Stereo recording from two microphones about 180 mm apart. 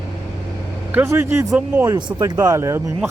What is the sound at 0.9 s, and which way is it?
Speech, 10° right (ahead or behind).